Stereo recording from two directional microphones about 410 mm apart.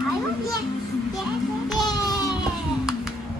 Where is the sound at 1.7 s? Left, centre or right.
Centre.